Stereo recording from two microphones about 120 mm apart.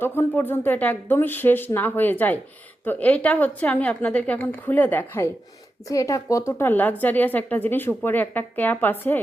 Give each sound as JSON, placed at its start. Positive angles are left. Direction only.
{"t": 0.0, "sound": "speech", "side_deg": 20}